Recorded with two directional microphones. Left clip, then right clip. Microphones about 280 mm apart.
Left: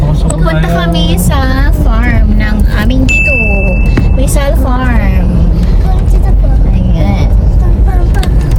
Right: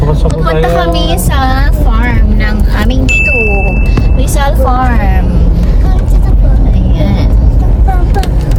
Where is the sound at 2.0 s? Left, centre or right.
Centre.